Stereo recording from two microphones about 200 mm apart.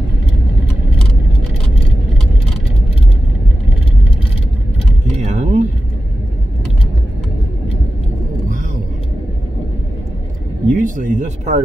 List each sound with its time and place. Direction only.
5.1 s vehicle: 35° right (ahead or behind)
10.7 s speech: 40° right (ahead or behind)